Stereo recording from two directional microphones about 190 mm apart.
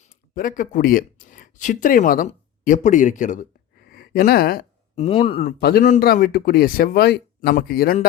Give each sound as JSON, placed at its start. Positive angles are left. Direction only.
{"t": 0.3, "sound": "speech", "side_deg": 45}
{"t": 4.9, "sound": "speech", "side_deg": 30}
{"t": 5.5, "sound": "speech", "side_deg": 55}